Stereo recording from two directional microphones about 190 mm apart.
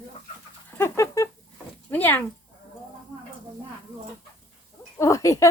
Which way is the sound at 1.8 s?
10° left (ahead or behind).